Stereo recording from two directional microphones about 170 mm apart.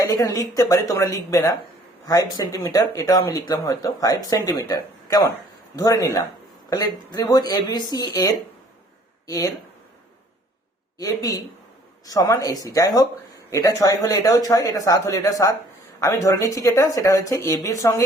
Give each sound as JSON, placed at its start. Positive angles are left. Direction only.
{"t": 0.0, "sound": "speech", "side_deg": 20}
{"t": 10.9, "sound": "speech", "side_deg": 20}